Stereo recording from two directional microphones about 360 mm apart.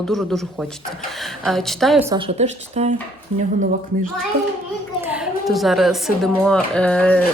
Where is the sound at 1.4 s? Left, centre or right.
Centre.